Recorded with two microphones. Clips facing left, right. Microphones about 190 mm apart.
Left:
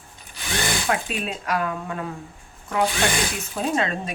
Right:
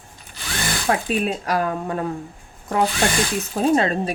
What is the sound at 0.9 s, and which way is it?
Speech, 35° right (ahead or behind).